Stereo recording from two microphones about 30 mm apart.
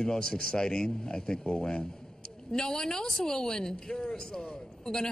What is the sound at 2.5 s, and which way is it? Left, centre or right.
Speech, centre.